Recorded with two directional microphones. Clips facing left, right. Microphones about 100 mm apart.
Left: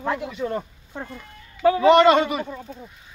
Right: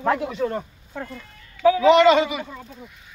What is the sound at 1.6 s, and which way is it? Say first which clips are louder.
Speech: even; 45° left (ahead or behind).